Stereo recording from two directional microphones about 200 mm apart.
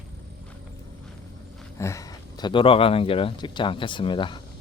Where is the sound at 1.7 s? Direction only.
15° left (ahead or behind).